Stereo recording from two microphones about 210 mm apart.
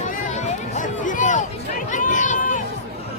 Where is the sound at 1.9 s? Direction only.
35° left (ahead or behind).